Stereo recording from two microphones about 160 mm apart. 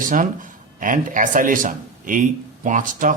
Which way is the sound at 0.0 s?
55° right (ahead or behind).